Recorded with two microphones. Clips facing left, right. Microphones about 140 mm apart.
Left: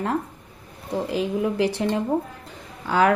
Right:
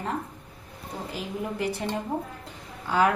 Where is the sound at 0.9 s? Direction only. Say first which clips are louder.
Left 10 dB; 90° left.